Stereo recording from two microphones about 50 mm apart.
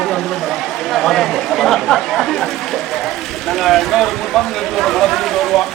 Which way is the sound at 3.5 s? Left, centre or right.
Centre.